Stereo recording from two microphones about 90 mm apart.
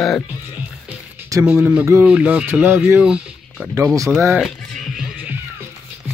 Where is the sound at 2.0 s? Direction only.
15° right (ahead or behind).